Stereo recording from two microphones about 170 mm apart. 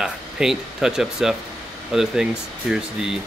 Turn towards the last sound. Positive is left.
turn(degrees=-5)  # may be behind; listen again after turning